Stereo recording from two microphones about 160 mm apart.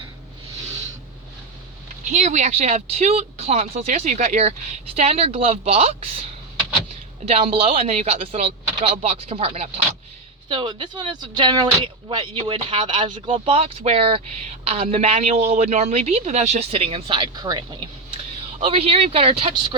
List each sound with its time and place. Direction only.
2.1 s speech: 45° right (ahead or behind); by 17.7 s 25° right (ahead or behind)
18.6 s speech: 40° right (ahead or behind)